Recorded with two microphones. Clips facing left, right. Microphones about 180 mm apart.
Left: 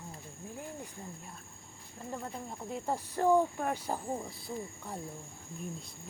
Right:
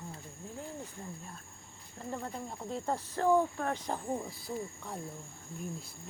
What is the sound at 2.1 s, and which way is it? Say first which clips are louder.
Speech: right 1 dB; 5° left (ahead or behind).